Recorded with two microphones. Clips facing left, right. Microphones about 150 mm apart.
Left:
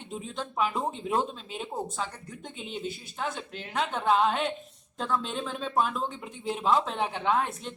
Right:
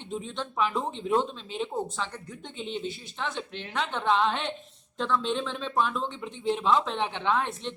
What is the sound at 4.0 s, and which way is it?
A woman's voice, 5° left (ahead or behind).